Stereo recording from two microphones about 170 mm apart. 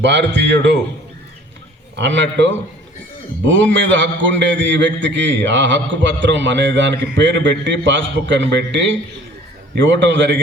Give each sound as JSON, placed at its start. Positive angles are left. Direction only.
{"t": 0.0, "sound": "a man's voice", "side_deg": -90}
{"t": 2.0, "sound": "a man's voice", "side_deg": -90}